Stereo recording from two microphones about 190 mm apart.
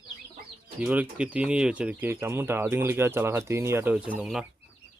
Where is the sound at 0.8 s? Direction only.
5° right (ahead or behind).